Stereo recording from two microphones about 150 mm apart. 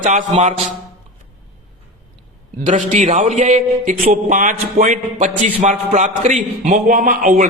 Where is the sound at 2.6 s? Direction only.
55° right (ahead or behind).